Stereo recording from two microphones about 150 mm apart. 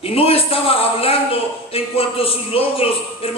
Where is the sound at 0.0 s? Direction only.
40° left (ahead or behind).